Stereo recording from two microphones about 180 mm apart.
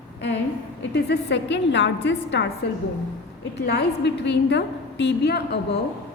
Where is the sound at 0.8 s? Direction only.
65° left (ahead or behind).